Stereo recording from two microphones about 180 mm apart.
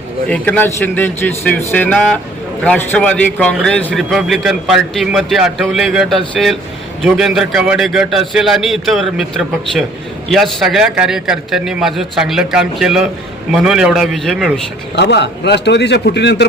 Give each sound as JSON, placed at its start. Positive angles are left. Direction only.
{"t": 0.3, "sound": "a man's voice", "side_deg": 10}
{"t": 14.9, "sound": "a man's voice", "side_deg": 70}